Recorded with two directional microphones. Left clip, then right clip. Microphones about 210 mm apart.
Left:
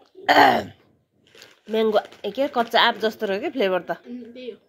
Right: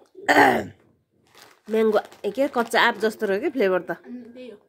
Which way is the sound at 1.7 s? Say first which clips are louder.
Even; 35° right (ahead or behind).